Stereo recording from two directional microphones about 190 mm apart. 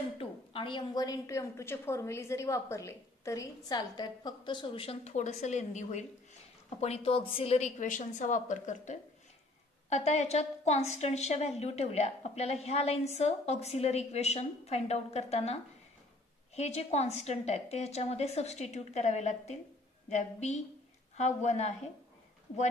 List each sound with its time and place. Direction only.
0.2 s a woman's voice: 30° left (ahead or behind)